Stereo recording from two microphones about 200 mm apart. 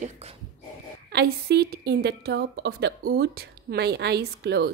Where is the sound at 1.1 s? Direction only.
55° right (ahead or behind).